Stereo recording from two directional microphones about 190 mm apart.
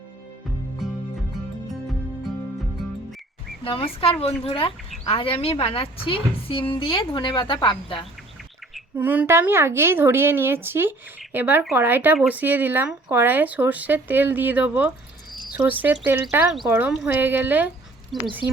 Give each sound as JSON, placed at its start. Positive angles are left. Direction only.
{"t": 3.6, "sound": "a woman's voice", "side_deg": 30}
{"t": 9.0, "sound": "speech", "side_deg": -10}